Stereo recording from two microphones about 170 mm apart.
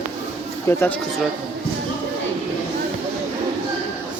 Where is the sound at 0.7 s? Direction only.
15° left (ahead or behind).